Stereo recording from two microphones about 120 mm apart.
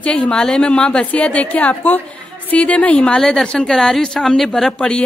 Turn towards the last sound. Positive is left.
turn(degrees=5)  # may be behind; listen again after turning